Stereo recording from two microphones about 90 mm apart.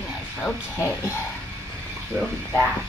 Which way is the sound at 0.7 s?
35° left (ahead or behind).